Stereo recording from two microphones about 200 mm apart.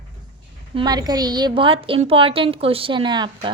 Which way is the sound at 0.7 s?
20° right (ahead or behind).